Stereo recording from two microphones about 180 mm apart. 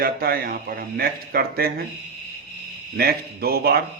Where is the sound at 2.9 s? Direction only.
60° right (ahead or behind).